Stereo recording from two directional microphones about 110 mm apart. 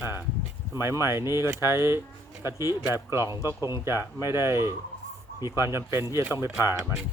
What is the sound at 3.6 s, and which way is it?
Speech, 25° right (ahead or behind).